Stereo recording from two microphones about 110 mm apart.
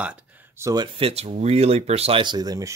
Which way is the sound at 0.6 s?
25° right (ahead or behind).